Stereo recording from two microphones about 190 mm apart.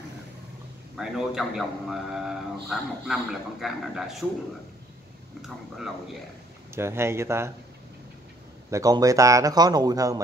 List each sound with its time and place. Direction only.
0.9 s speech: 5° right (ahead or behind)
6.7 s a man's voice: 15° right (ahead or behind)
8.6 s a man's voice: 15° right (ahead or behind)